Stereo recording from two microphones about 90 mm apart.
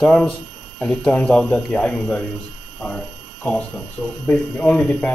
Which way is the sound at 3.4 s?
15° left (ahead or behind).